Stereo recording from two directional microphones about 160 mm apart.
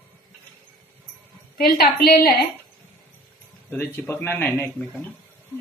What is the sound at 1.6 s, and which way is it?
Speech, 70° left (ahead or behind).